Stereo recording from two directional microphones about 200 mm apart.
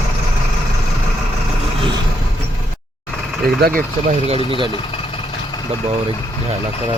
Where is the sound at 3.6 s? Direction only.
50° right (ahead or behind).